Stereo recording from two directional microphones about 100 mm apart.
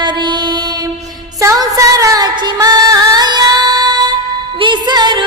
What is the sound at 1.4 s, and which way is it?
Music, 35° right (ahead or behind).